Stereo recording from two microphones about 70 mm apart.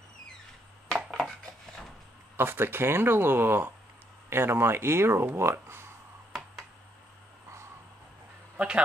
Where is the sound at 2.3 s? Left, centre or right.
Right.